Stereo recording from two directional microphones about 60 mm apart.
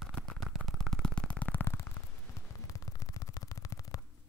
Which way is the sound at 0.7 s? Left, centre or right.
Centre.